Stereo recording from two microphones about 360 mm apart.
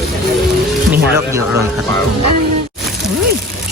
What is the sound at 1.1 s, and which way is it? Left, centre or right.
Speech, centre.